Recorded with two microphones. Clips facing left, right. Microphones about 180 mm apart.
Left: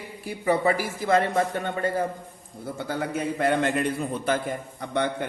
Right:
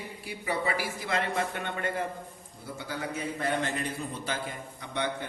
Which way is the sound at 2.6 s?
55° left (ahead or behind).